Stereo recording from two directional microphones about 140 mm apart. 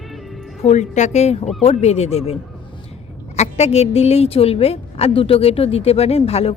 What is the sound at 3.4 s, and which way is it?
A woman's voice, 50° left (ahead or behind).